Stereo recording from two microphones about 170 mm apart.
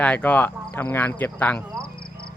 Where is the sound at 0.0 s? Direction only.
10° left (ahead or behind).